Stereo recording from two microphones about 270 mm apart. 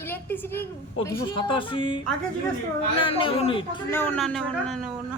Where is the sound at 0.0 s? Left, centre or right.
Centre.